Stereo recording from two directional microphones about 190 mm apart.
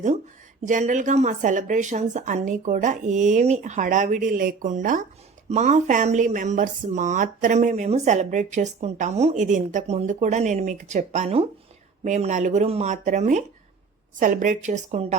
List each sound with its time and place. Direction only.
0.6 s speech: 40° right (ahead or behind)